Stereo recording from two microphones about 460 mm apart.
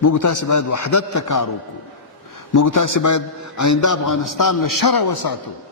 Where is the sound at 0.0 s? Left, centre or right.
Left.